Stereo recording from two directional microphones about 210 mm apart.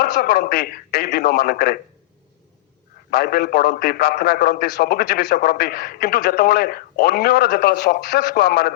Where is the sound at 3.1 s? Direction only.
45° left (ahead or behind).